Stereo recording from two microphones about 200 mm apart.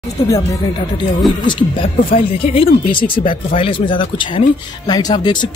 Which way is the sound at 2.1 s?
30° left (ahead or behind).